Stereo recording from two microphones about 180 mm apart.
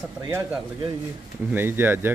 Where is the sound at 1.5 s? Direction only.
10° right (ahead or behind).